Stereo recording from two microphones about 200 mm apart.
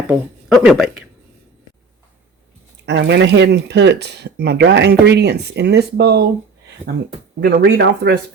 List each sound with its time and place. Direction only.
0.1 s speech: 5° right (ahead or behind)
2.8 s speech: 60° right (ahead or behind)
6.8 s speech: 10° right (ahead or behind)
7.6 s speech: 55° right (ahead or behind)